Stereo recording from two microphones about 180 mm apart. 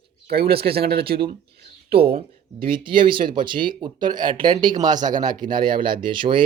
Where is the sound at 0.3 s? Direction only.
60° right (ahead or behind).